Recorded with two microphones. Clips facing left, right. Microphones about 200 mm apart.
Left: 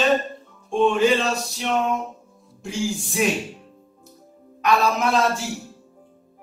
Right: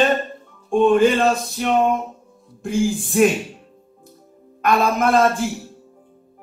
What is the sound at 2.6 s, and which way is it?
Music, 50° right (ahead or behind).